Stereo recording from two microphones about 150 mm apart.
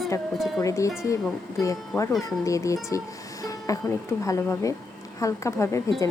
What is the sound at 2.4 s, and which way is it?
Speech, 20° left (ahead or behind).